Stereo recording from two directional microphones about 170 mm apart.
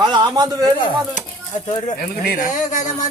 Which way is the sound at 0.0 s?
25° right (ahead or behind).